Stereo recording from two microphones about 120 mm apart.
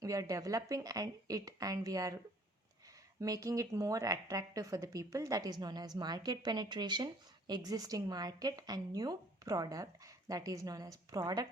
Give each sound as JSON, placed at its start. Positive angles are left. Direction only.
{"t": 0.0, "sound": "speech", "side_deg": -30}
{"t": 3.2, "sound": "speech", "side_deg": -30}